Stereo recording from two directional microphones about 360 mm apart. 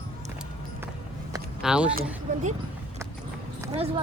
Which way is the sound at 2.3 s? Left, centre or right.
Right.